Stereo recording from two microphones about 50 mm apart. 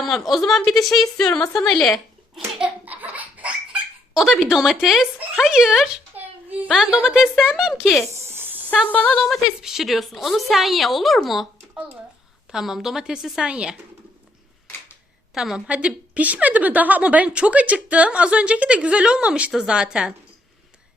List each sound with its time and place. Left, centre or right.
0.0 s a woman's voice: centre
1.2 s a woman's voice: left
2.8 s a sound: right
4.1 s a woman's voice: centre
6.1 s a sound: right
6.7 s a woman's voice: centre
8.3 s a sound: right
8.7 s a sound: left
9.6 s a woman's voice: centre
12.5 s speech: centre
13.4 s a woman's voice: centre
15.4 s a woman's voice: centre